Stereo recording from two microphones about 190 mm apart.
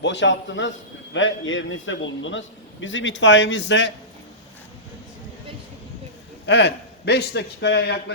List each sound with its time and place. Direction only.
0.0 s a man's voice: 70° left (ahead or behind)
6.4 s a man's voice: 65° left (ahead or behind)